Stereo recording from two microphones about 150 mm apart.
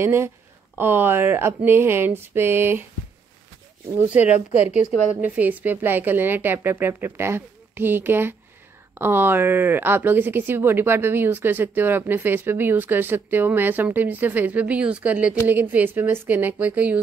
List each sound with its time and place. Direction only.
0.0 s a woman's voice: 15° right (ahead or behind)
4.6 s a woman's voice: 50° left (ahead or behind)
5.2 s a woman's voice: 10° right (ahead or behind)